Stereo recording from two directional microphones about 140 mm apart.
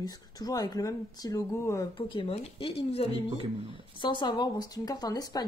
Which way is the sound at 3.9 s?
35° left (ahead or behind).